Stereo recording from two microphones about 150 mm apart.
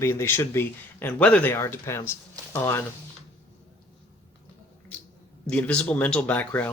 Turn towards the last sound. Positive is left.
turn(degrees=10)  # may be behind; listen again after turning